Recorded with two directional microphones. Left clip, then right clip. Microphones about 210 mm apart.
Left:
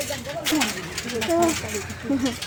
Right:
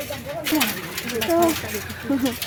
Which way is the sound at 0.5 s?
45° right (ahead or behind).